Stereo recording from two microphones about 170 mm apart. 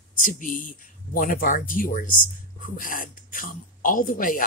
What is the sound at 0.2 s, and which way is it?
Speech, 50° left (ahead or behind).